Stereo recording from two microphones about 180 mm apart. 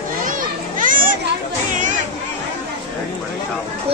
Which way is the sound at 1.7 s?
45° right (ahead or behind).